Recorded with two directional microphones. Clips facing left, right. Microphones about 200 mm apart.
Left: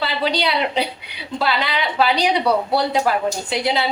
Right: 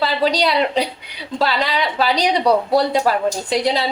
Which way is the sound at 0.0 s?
40° right (ahead or behind).